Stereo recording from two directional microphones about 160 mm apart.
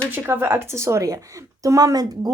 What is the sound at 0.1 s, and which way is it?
Speech, 10° right (ahead or behind).